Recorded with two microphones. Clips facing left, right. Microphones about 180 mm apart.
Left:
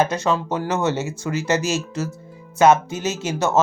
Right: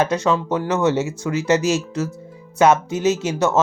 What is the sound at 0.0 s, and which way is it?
Speech, 5° left (ahead or behind).